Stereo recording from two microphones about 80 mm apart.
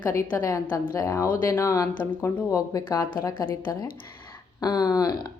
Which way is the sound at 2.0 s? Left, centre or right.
Left.